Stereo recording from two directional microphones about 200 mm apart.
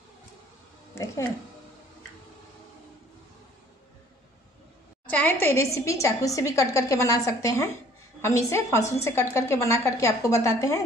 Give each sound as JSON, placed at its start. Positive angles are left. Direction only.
{"t": 0.9, "sound": "speech", "side_deg": 15}
{"t": 5.0, "sound": "a woman's voice", "side_deg": 10}